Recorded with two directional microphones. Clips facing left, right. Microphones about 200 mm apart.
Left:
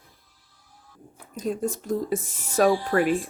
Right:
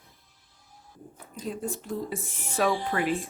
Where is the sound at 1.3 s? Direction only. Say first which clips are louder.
Left 6 dB; 45° left (ahead or behind).